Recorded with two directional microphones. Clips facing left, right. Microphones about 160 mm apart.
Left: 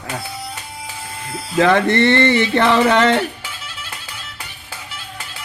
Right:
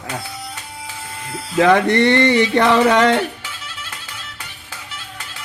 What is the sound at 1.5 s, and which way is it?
Music, 10° right (ahead or behind).